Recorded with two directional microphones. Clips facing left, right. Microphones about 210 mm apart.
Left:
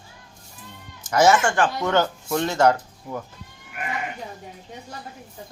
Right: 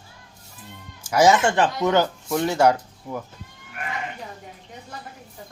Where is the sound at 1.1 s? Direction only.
15° right (ahead or behind).